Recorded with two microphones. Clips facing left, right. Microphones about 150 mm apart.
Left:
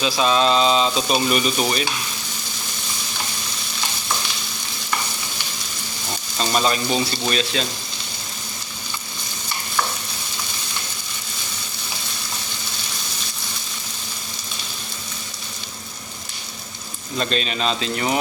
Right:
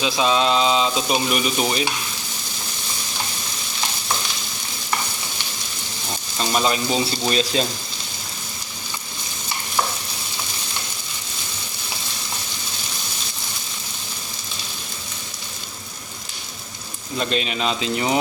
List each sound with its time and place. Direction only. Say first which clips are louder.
0.0 s speech: left 1 dB; 15° right (ahead or behind)
6.4 s speech: even; 15° right (ahead or behind)
7.3 s speech: right 4 dB; 30° right (ahead or behind)
17.2 s speech: even; 15° right (ahead or behind)